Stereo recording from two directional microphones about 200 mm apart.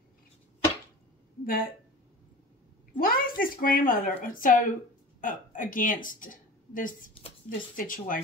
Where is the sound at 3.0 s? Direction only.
45° left (ahead or behind).